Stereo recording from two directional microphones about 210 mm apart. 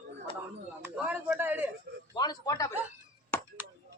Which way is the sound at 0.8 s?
10° right (ahead or behind).